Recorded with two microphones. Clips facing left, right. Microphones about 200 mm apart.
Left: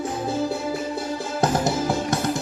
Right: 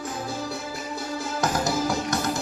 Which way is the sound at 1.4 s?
30° left (ahead or behind).